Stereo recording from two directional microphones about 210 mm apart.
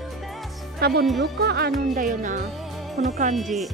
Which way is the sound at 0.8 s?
45° right (ahead or behind).